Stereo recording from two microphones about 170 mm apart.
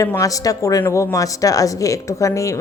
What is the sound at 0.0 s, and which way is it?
Speech, 20° left (ahead or behind).